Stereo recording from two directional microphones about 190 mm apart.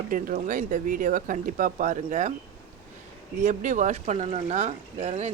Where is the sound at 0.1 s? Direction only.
45° right (ahead or behind).